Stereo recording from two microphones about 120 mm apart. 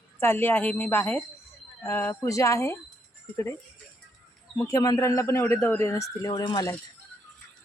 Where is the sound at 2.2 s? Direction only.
25° left (ahead or behind).